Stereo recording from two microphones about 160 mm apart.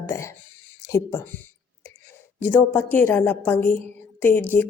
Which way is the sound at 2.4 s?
10° left (ahead or behind).